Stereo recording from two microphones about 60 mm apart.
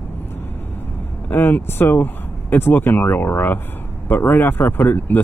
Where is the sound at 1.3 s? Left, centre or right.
Left.